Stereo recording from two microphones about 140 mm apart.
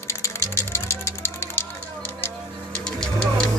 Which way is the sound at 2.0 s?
15° left (ahead or behind).